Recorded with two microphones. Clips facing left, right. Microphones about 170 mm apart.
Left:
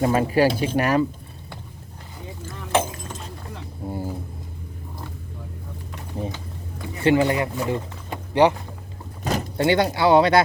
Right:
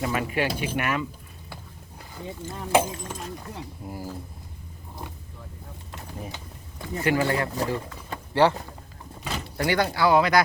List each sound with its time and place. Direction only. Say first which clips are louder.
0.0 s speech: left 8 dB; 35° left (ahead or behind)
2.7 s clip-clop: even; 15° right (ahead or behind)
3.8 s a sound: left 8 dB; 25° left (ahead or behind)
7.0 s speech: left 5 dB; 20° left (ahead or behind)
7.7 s a sound: left 3 dB; 15° left (ahead or behind)
9.2 s door: left 8 dB; 40° left (ahead or behind)
9.6 s speech: left 3 dB; 25° left (ahead or behind)